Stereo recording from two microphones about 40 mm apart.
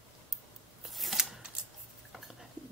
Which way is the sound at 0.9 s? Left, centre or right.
Centre.